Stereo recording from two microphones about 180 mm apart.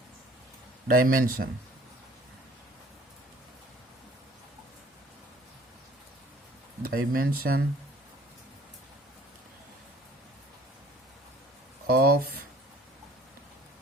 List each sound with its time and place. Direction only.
0.9 s a man's voice: 50° right (ahead or behind)
6.8 s speech: 55° right (ahead or behind)
11.9 s speech: 60° right (ahead or behind)